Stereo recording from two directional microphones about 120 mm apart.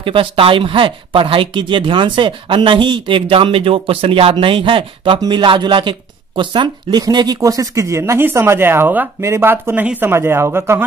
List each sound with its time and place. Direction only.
0.0 s speech: 50° right (ahead or behind); by 10.8 s 20° right (ahead or behind)